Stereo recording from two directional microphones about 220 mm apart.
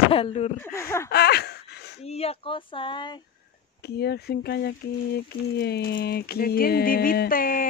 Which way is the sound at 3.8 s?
50° left (ahead or behind).